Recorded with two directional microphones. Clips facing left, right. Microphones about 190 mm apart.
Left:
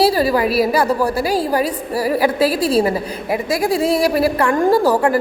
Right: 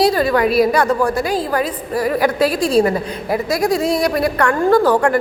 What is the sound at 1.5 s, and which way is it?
Speech, 30° left (ahead or behind).